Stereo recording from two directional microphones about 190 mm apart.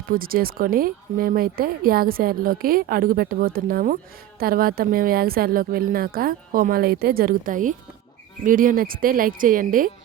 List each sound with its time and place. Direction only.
0.1 s speech: 50° right (ahead or behind)